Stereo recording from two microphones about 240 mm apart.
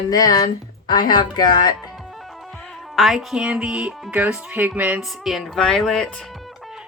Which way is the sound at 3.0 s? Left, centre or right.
Centre.